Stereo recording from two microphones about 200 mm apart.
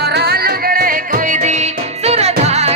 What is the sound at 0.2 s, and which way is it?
Music, 50° right (ahead or behind).